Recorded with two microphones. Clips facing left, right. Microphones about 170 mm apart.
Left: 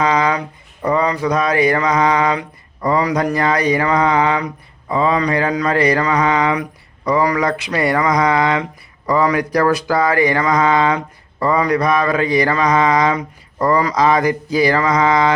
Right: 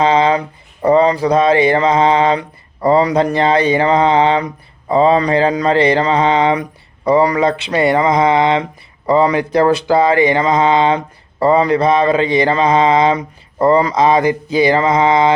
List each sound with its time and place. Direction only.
0.0 s speech: 25° right (ahead or behind)